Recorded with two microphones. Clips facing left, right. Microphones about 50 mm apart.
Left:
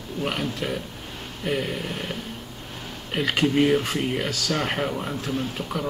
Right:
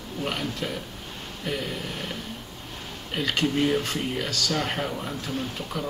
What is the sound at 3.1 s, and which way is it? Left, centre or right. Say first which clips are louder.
Speech: left 3 dB; centre.